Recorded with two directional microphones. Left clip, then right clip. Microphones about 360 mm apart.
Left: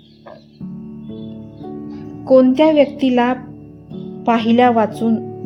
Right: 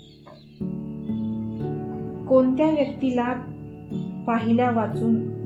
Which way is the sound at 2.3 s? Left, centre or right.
Centre.